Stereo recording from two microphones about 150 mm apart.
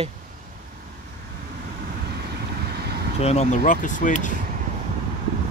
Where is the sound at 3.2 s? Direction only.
50° left (ahead or behind).